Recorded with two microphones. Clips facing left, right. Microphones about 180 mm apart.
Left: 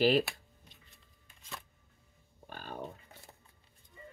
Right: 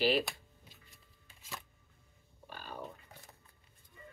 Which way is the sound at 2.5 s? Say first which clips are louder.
Left 3 dB; 45° left (ahead or behind).